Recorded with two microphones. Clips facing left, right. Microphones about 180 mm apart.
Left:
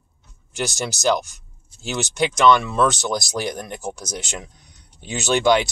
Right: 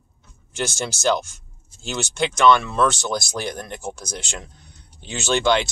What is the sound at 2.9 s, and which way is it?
Speech, 15° left (ahead or behind).